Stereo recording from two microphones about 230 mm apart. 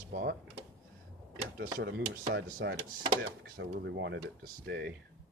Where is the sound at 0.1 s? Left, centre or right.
Right.